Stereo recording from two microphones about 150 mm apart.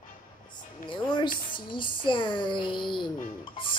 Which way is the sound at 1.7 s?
35° left (ahead or behind).